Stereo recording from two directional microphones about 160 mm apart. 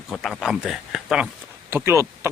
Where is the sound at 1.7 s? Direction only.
15° right (ahead or behind).